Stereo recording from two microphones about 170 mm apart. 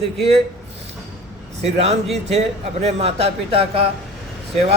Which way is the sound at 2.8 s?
40° right (ahead or behind).